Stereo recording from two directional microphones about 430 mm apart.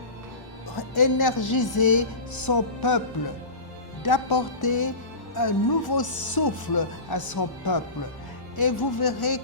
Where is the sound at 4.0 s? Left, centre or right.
Left.